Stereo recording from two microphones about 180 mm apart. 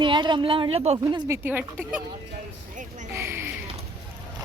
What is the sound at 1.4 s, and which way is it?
Speech, 10° right (ahead or behind).